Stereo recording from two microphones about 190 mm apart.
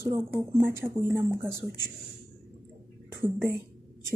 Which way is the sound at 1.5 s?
65° left (ahead or behind).